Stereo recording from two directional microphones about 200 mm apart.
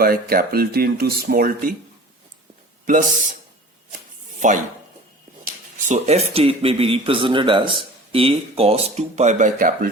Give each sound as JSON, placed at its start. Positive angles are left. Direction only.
{"t": 0.0, "sound": "speech", "side_deg": -50}
{"t": 2.8, "sound": "speech", "side_deg": -40}
{"t": 4.4, "sound": "speech", "side_deg": -40}
{"t": 5.9, "sound": "speech", "side_deg": -30}